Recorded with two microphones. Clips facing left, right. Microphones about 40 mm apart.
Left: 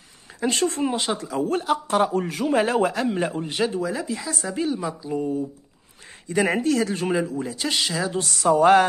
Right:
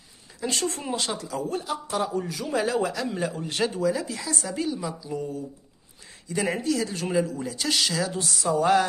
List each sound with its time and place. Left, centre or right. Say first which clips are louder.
0.4 s a man's voice: left 6 dB; left
0.8 s speech: left 5 dB; centre
1.5 s a man's voice: left 9 dB; left
3.5 s a woman's voice: right 1 dB; centre
6.2 s speech: left 5 dB; left
7.1 s a woman's voice: left 2 dB; centre
8.2 s a man's voice: left 8 dB; left